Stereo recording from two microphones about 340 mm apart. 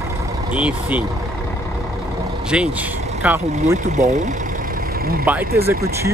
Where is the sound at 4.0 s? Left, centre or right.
Centre.